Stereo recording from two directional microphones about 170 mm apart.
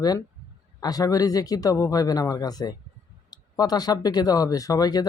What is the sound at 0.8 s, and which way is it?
Speech, 20° left (ahead or behind).